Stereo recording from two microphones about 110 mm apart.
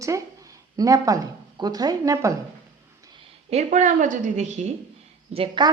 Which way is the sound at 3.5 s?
70° right (ahead or behind).